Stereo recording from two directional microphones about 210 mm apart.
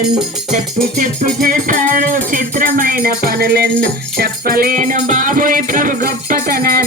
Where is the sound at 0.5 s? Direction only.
35° right (ahead or behind).